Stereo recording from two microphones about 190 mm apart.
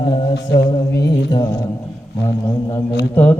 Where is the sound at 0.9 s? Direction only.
15° left (ahead or behind).